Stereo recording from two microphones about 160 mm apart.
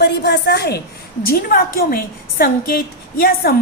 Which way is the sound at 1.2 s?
70° left (ahead or behind).